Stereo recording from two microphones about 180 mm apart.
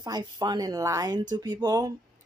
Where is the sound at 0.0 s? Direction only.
20° right (ahead or behind).